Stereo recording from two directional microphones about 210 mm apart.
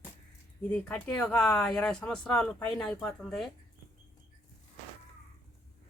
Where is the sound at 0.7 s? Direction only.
5° left (ahead or behind).